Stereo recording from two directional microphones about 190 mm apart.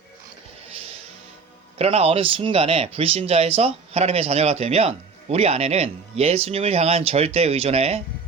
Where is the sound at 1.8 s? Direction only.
30° right (ahead or behind).